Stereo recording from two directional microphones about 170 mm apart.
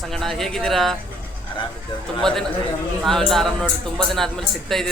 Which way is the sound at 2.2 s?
5° left (ahead or behind).